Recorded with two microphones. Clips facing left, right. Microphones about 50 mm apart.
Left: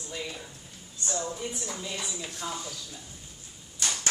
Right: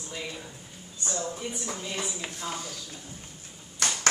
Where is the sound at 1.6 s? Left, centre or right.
Right.